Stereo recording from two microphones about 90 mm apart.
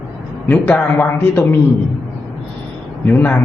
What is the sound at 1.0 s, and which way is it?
Speech, 25° left (ahead or behind).